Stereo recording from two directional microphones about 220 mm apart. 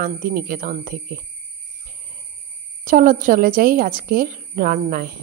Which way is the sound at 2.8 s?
40° right (ahead or behind).